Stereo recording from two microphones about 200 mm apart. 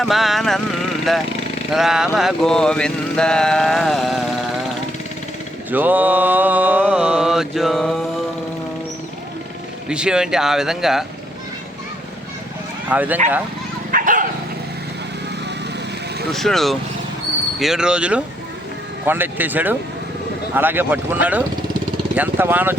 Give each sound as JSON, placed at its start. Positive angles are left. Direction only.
{"t": 0.0, "sound": "mantra", "side_deg": 0}
{"t": 5.7, "sound": "mantra", "side_deg": -10}
{"t": 9.9, "sound": "mantra", "side_deg": -5}
{"t": 12.9, "sound": "mantra", "side_deg": -10}
{"t": 13.9, "sound": "dog", "side_deg": -40}
{"t": 16.3, "sound": "mantra", "side_deg": 0}
{"t": 22.1, "sound": "speech", "side_deg": -10}